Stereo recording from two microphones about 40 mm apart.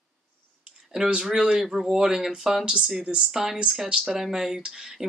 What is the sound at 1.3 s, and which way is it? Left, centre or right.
Speech, centre.